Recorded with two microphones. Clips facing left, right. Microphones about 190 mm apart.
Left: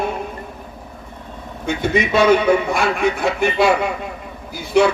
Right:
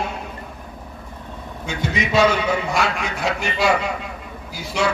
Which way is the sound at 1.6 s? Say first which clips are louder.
Left 6 dB; 55° left (ahead or behind).